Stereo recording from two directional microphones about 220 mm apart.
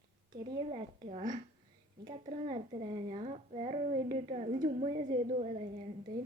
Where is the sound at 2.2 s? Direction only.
25° right (ahead or behind).